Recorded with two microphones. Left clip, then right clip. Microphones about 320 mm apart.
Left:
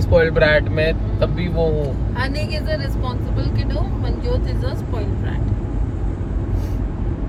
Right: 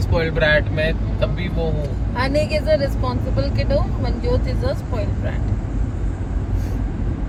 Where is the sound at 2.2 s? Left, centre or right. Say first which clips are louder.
Right 6 dB; centre.